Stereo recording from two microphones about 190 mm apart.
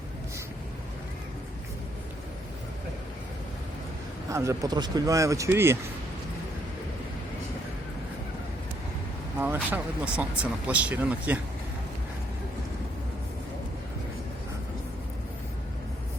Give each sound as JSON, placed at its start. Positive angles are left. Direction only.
{"t": 4.3, "sound": "speech", "side_deg": -15}
{"t": 9.4, "sound": "speech", "side_deg": -10}